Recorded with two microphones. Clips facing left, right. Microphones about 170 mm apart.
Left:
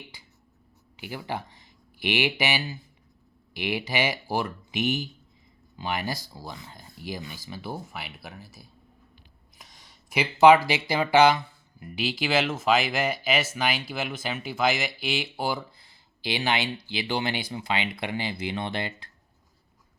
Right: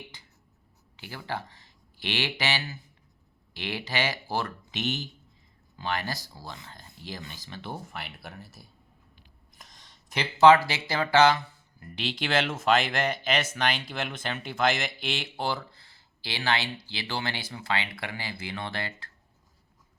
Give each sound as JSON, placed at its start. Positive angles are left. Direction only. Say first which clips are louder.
{"t": 0.9, "sound": "speech", "louder": "left 2 dB", "side_deg": 15}